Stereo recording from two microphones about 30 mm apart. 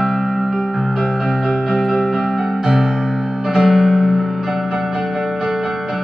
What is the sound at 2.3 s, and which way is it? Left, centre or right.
Music, centre.